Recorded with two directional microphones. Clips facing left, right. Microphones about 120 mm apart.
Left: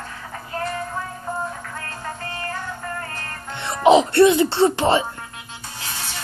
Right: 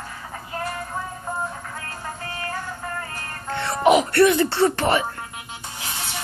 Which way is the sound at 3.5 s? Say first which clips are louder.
Left 2 dB; 20° left (ahead or behind).